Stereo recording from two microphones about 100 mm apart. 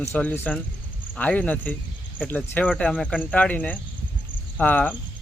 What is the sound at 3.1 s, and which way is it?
Speech, 15° left (ahead or behind).